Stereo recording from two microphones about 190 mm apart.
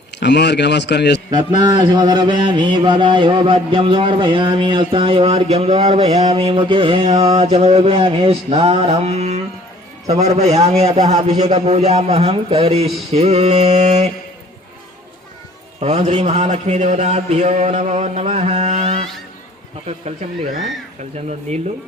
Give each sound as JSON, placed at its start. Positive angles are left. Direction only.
{"t": 0.2, "sound": "a man's voice", "side_deg": 65}
{"t": 1.6, "sound": "mantra", "side_deg": -20}
{"t": 10.1, "sound": "a man's voice", "side_deg": -35}
{"t": 15.8, "sound": "a man's voice", "side_deg": -35}
{"t": 21.5, "sound": "a man's voice", "side_deg": -35}